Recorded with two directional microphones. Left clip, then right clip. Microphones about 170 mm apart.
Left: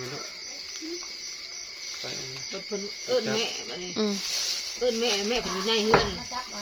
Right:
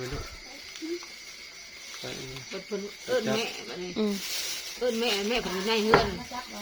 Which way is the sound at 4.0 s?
Centre (ahead or behind).